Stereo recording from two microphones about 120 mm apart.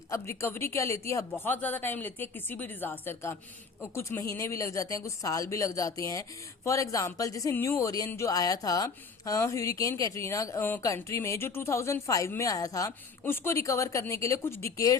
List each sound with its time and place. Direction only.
0.1 s a woman's voice: 25° left (ahead or behind)